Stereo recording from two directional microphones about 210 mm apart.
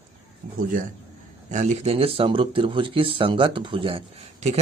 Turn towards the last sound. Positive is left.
turn(degrees=-30)  # may be behind; listen again after turning